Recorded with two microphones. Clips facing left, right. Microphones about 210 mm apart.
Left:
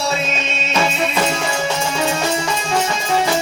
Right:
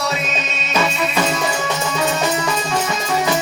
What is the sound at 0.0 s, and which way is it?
Music, 30° left (ahead or behind).